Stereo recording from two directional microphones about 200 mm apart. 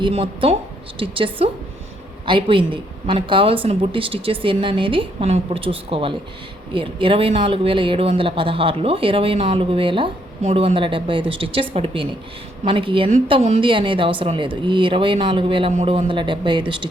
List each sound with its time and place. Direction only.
0.0 s speech: 30° right (ahead or behind)